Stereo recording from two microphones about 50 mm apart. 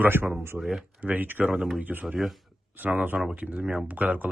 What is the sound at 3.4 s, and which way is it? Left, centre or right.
Speech, right.